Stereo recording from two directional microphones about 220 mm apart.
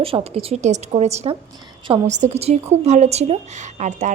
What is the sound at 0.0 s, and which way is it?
A woman's voice, 25° right (ahead or behind).